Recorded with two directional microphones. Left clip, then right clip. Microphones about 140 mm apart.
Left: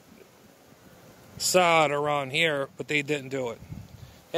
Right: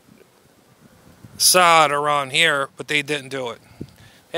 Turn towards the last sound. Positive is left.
turn(degrees=-10)  # may be behind; listen again after turning